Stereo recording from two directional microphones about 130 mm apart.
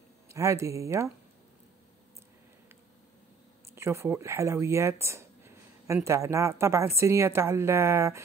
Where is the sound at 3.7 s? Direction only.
20° right (ahead or behind).